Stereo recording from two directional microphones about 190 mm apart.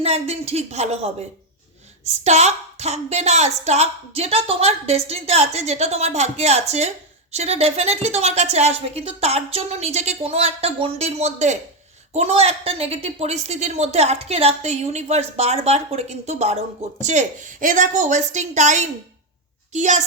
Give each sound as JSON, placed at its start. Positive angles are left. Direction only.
{"t": 0.0, "sound": "speech", "side_deg": -35}
{"t": 2.2, "sound": "speech", "side_deg": -35}